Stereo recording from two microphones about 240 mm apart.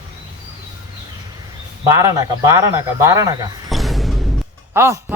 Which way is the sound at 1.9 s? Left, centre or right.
Centre.